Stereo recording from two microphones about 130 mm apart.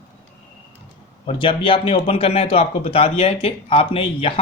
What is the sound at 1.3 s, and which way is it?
Speech, 40° left (ahead or behind).